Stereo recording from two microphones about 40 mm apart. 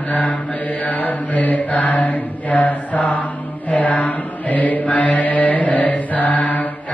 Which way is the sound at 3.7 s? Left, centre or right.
Left.